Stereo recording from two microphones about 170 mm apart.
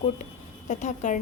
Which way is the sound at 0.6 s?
45° left (ahead or behind).